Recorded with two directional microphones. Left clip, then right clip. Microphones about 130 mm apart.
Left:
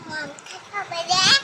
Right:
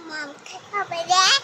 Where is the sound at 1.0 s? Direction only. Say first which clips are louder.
Right 2 dB; 15° right (ahead or behind).